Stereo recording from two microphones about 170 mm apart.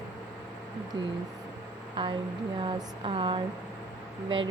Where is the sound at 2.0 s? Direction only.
30° right (ahead or behind).